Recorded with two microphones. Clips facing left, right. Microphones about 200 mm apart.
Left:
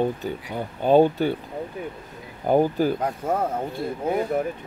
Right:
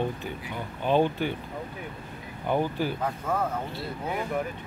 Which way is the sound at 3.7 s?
45° left (ahead or behind).